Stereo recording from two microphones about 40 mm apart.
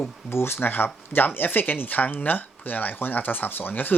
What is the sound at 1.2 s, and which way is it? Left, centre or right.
Speech, left.